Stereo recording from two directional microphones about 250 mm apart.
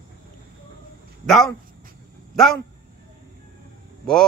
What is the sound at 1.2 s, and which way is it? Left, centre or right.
Speech, centre.